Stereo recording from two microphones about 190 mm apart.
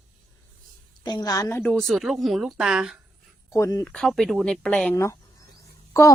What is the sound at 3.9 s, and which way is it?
Speech, centre (ahead or behind).